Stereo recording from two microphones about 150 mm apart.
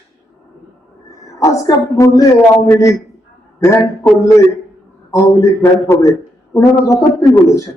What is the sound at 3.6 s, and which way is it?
Speech, 20° left (ahead or behind).